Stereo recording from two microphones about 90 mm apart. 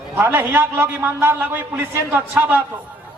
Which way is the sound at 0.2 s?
20° right (ahead or behind).